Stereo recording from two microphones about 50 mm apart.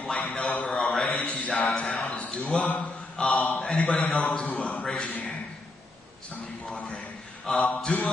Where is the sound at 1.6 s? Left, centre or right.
Centre.